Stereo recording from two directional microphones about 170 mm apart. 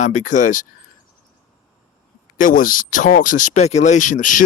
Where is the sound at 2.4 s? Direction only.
55° left (ahead or behind).